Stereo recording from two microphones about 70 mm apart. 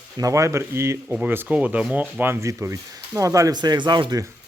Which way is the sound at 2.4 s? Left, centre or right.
Right.